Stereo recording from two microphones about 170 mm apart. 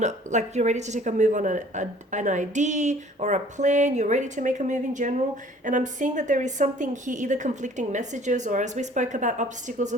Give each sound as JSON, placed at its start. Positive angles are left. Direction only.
{"t": 0.0, "sound": "a woman's voice", "side_deg": -45}